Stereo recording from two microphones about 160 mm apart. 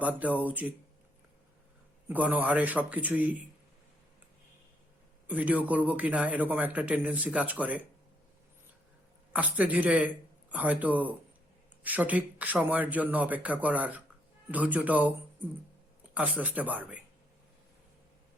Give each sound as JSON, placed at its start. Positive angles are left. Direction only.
{"t": 0.0, "sound": "a man's voice", "side_deg": -10}
{"t": 2.0, "sound": "a man's voice", "side_deg": -10}
{"t": 5.3, "sound": "a man's voice", "side_deg": -10}
{"t": 9.3, "sound": "a man's voice", "side_deg": -10}
{"t": 16.1, "sound": "a man's voice", "side_deg": -10}